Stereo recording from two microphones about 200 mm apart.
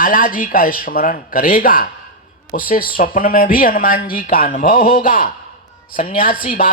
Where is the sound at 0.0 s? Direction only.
45° left (ahead or behind).